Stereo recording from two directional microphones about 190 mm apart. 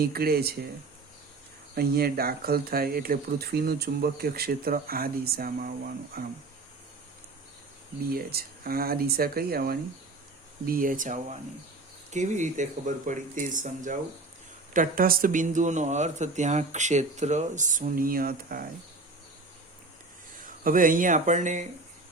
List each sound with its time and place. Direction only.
0.0 s speech: 55° right (ahead or behind)
1.7 s speech: 55° right (ahead or behind)
8.1 s speech: 55° right (ahead or behind)
20.4 s speech: 45° right (ahead or behind)